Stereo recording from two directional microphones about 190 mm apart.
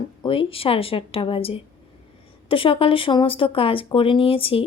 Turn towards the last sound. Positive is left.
turn(degrees=30)  # may be behind; listen again after turning